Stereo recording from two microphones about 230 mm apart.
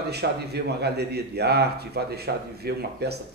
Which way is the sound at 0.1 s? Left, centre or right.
Right.